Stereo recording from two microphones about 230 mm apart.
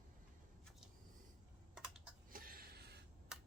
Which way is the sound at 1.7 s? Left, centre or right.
Centre.